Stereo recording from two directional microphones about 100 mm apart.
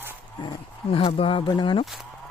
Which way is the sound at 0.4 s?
65° left (ahead or behind).